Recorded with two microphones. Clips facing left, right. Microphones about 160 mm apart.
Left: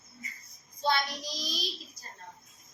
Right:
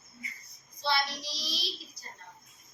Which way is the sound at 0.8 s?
45° left (ahead or behind).